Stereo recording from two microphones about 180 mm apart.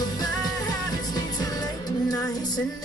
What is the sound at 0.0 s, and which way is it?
Music, 20° left (ahead or behind).